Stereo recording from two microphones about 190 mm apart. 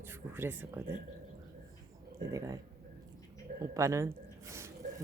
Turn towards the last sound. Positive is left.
turn(degrees=-15)  # may be behind; listen again after turning